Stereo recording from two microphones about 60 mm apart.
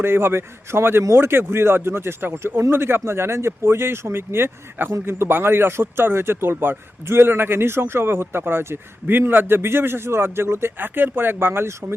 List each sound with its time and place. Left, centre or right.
0.0 s speech: right